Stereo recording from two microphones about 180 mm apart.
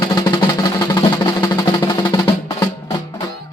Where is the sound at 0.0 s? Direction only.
20° left (ahead or behind).